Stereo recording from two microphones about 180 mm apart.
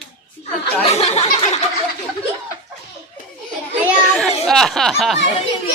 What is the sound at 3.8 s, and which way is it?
A child's voice, centre (ahead or behind).